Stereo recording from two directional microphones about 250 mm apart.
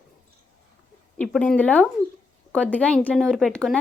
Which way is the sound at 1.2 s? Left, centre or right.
Centre.